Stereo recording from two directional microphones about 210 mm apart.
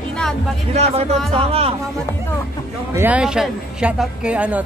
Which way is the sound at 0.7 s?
30° right (ahead or behind).